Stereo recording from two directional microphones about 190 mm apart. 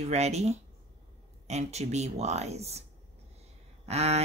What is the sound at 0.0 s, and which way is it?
Speech, 35° right (ahead or behind).